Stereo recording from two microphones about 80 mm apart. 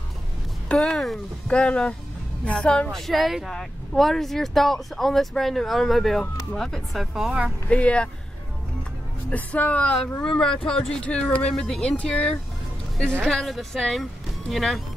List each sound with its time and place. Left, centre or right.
0.7 s speech: centre
7.7 s speech: centre
9.3 s speech: centre